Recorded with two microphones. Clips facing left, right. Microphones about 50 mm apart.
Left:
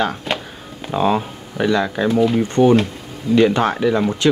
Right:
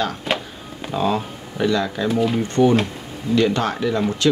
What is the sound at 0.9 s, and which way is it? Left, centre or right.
Speech, left.